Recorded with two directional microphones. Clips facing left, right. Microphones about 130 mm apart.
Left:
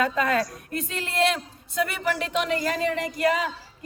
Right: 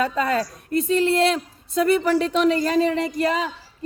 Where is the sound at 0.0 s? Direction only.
30° right (ahead or behind).